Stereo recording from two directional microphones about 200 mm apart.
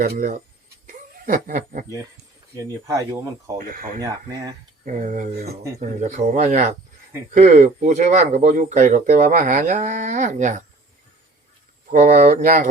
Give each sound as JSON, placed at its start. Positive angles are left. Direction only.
{"t": 0.0, "sound": "speech", "side_deg": -45}
{"t": 0.9, "sound": "a sound", "side_deg": -45}
{"t": 2.6, "sound": "speech", "side_deg": -15}
{"t": 3.6, "sound": "speech", "side_deg": -45}
{"t": 4.0, "sound": "speech", "side_deg": -15}
{"t": 4.9, "sound": "speech", "side_deg": -40}
{"t": 11.9, "sound": "speech", "side_deg": -45}